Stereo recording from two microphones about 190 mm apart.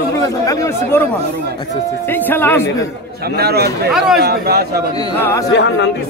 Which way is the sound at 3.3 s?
55° right (ahead or behind).